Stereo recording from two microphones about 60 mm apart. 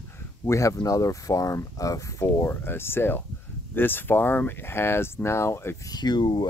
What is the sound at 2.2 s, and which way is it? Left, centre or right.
Speech, left.